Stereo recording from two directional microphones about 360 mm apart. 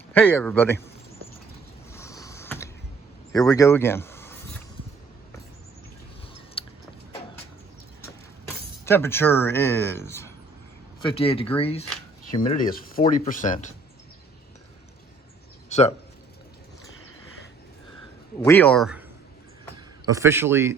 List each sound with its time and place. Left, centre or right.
0.1 s speech: centre
1.9 s a sound: centre
3.3 s speech: centre
6.6 s a sound: centre
8.8 s speech: centre
15.7 s speech: centre
18.4 s speech: centre
20.1 s a man's voice: centre